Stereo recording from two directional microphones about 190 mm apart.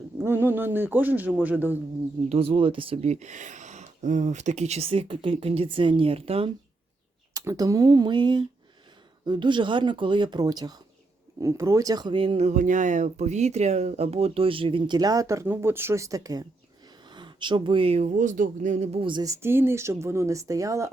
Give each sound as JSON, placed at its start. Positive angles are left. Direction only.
{"t": 0.2, "sound": "a man's voice", "side_deg": -10}
{"t": 2.3, "sound": "speech", "side_deg": -30}
{"t": 7.3, "sound": "speech", "side_deg": -20}